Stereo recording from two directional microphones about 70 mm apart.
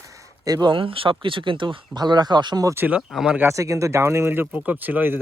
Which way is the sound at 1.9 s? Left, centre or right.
Right.